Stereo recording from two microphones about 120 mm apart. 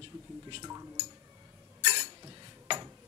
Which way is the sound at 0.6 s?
30° right (ahead or behind).